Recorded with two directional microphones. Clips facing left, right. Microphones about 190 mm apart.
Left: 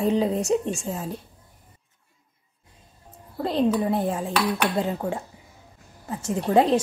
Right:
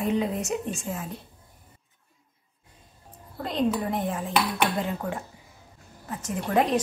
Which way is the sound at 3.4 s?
30° left (ahead or behind).